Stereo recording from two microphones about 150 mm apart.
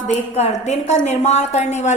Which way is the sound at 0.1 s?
45° left (ahead or behind).